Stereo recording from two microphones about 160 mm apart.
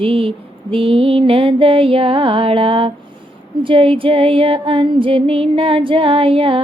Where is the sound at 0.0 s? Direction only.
35° right (ahead or behind).